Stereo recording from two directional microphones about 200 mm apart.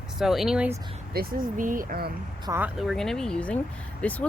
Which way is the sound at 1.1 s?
45° right (ahead or behind).